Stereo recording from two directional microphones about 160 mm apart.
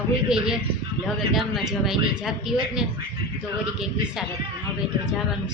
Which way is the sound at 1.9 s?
5° right (ahead or behind).